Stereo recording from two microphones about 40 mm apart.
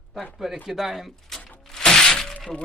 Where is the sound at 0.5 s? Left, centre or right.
Centre.